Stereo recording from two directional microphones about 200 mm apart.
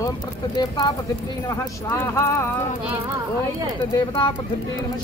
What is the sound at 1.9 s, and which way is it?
Speech, 15° left (ahead or behind).